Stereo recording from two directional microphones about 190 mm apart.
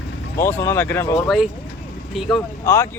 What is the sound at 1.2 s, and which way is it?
Speech, centre (ahead or behind).